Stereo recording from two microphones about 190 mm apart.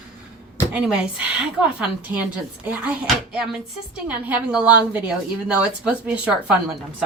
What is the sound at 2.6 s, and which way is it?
Speech, 5° right (ahead or behind).